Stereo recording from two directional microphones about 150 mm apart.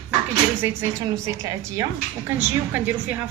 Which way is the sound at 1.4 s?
20° right (ahead or behind).